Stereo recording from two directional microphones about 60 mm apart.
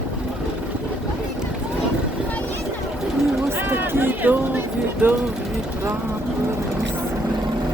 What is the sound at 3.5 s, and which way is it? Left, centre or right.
Run, right.